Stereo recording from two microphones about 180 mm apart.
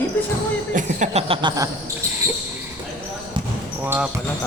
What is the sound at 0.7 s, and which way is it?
Speech, 45° right (ahead or behind).